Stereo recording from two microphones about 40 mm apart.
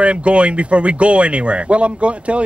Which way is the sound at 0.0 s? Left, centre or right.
Right.